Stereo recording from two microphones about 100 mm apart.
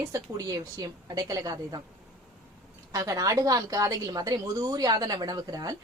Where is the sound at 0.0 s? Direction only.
35° right (ahead or behind).